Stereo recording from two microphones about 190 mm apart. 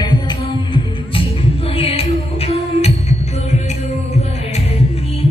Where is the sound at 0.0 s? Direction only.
25° left (ahead or behind).